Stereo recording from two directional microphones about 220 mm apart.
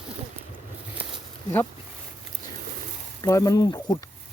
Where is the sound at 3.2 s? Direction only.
15° left (ahead or behind).